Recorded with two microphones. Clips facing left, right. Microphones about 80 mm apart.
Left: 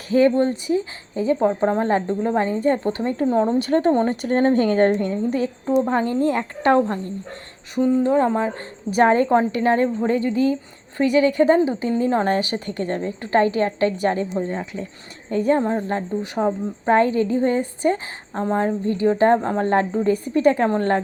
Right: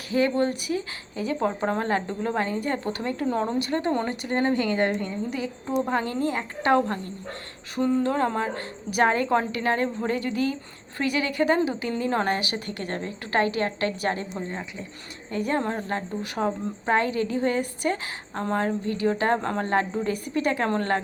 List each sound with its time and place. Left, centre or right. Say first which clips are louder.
0.1 s a woman's voice: left 6 dB; left
3.2 s speech: left 7 dB; centre
3.6 s a woman's voice: left 7 dB; left
5.6 s speech: left 5 dB; left
6.3 s a woman's voice: left 5 dB; left
6.7 s a woman's voice: left 4 dB; left